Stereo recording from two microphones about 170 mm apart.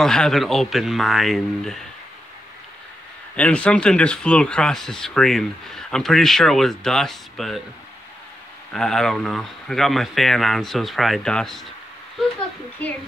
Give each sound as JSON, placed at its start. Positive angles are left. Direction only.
{"t": 0.0, "sound": "speech", "side_deg": 5}
{"t": 3.3, "sound": "speech", "side_deg": 5}
{"t": 8.7, "sound": "speech", "side_deg": 5}